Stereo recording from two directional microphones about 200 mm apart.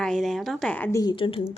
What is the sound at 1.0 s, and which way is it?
Speech, 25° left (ahead or behind).